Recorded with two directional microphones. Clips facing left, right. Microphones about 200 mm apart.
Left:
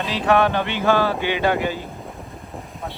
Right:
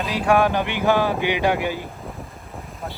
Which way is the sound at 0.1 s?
10° right (ahead or behind).